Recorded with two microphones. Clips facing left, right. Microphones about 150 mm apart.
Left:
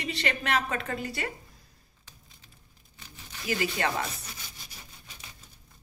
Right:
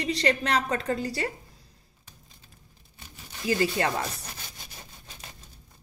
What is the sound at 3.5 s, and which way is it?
Speech, 30° right (ahead or behind).